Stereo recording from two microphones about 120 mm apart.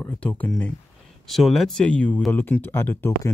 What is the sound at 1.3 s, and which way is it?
Speech, centre (ahead or behind).